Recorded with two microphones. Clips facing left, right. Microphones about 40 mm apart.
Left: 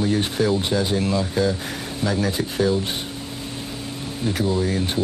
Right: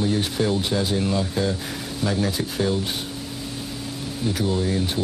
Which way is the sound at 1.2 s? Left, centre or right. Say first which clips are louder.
Left 2 dB; centre.